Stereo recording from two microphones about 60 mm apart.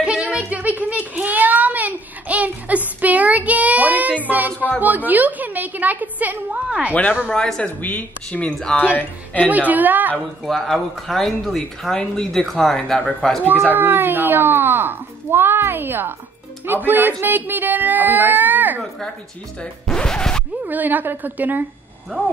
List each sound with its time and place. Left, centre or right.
0.0 s a sound: centre
0.5 s a sound: right
3.0 s child singing: right
6.9 s a woman's voice: left
7.2 s a woman's voice: centre; by 9.5 s left
9.5 s a woman's voice: right
10.1 s speech: centre
13.7 s speech: right
19.6 s zipper: centre
20.6 s speech: right